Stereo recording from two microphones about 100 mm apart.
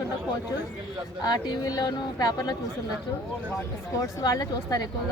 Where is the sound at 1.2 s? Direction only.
45° left (ahead or behind).